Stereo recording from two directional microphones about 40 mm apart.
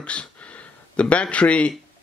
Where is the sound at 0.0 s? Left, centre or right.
Left.